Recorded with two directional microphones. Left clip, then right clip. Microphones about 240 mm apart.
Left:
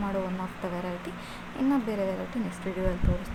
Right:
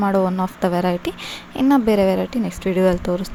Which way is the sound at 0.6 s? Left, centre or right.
Right.